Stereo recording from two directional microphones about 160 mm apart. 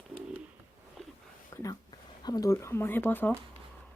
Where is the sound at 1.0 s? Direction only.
Centre (ahead or behind).